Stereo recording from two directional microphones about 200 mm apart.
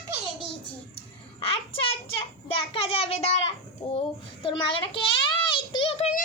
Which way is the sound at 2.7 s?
30° left (ahead or behind).